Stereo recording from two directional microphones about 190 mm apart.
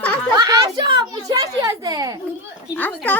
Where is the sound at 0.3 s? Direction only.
20° right (ahead or behind).